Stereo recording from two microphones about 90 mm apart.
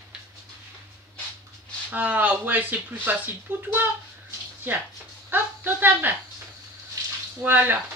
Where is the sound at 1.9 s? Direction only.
20° right (ahead or behind).